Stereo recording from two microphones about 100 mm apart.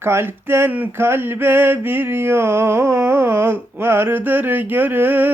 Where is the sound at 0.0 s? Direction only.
25° right (ahead or behind).